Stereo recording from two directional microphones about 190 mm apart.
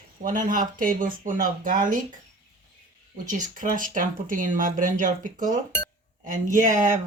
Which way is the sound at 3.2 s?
45° right (ahead or behind).